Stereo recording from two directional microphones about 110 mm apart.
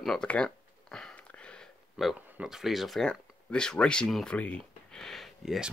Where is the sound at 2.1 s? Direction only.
5° right (ahead or behind).